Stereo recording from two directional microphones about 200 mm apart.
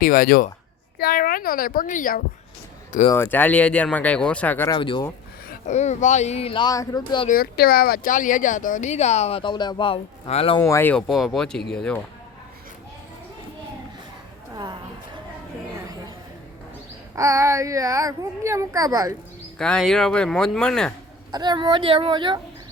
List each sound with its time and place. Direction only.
0.0 s a child's voice: 45° left (ahead or behind)
3.1 s speech: 10° left (ahead or behind)
4.7 s speech: 25° left (ahead or behind)
5.5 s speech: 35° left (ahead or behind); by 7.3 s 20° left (ahead or behind)
7.3 s speech: 50° left (ahead or behind); by 10.6 s 30° left (ahead or behind)
10.6 s speech: 15° left (ahead or behind)
14.5 s a sound: 20° right (ahead or behind)
17.2 s a child's voice: 15° right (ahead or behind)
19.5 s speech: 5° left (ahead or behind)
21.3 s speech: 20° right (ahead or behind)